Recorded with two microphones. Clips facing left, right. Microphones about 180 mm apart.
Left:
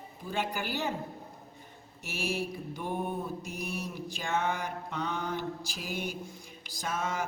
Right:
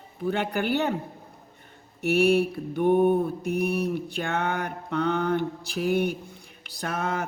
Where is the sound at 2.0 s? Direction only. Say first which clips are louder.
Right 14 dB; 65° right (ahead or behind).